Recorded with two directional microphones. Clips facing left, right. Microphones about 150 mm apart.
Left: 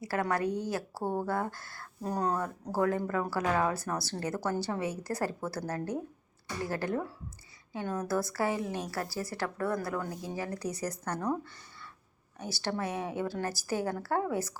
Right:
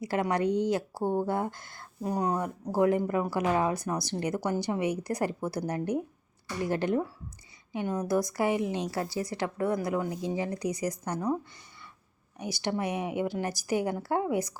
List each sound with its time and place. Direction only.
0.0 s a woman's voice: 20° right (ahead or behind)
12.4 s a woman's voice: 15° right (ahead or behind)